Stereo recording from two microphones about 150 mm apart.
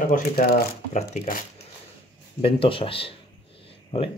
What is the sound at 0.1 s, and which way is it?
Speech, 90° left.